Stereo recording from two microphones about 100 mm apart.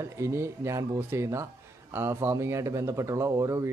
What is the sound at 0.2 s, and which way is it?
A man's voice, 30° right (ahead or behind).